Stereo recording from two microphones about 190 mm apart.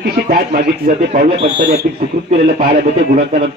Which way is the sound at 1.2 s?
30° right (ahead or behind).